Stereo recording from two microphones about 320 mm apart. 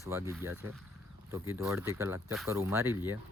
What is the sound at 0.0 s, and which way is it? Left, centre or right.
Speech, centre.